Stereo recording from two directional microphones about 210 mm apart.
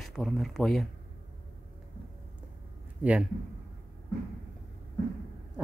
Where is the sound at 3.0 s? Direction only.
5° right (ahead or behind).